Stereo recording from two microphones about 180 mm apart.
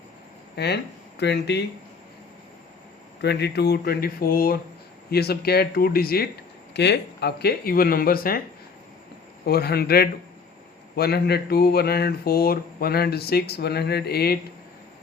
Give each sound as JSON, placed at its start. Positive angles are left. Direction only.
{"t": 0.5, "sound": "speech", "side_deg": 65}
{"t": 3.2, "sound": "speech", "side_deg": 65}
{"t": 6.7, "sound": "speech", "side_deg": 70}
{"t": 9.5, "sound": "speech", "side_deg": 60}